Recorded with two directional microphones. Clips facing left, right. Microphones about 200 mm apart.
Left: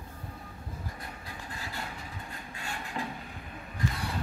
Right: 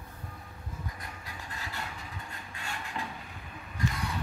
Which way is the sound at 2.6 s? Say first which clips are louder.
Left 2 dB; 35° left (ahead or behind).